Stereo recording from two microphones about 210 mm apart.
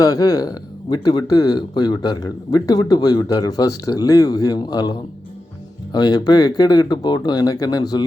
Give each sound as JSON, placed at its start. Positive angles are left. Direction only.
{"t": 0.0, "sound": "speech", "side_deg": 15}